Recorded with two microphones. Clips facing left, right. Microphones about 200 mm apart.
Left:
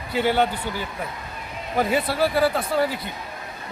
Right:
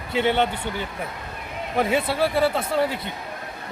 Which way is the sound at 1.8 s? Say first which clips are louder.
Even; 5° left (ahead or behind).